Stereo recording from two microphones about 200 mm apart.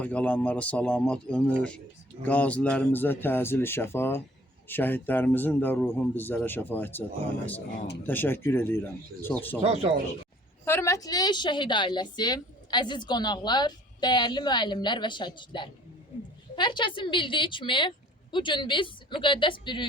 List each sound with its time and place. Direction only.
0.0 s a man's voice: 5° left (ahead or behind)
8.0 s a man's voice: 10° left (ahead or behind)
9.6 s speech: 30° right (ahead or behind)
10.7 s a woman's voice: 15° left (ahead or behind)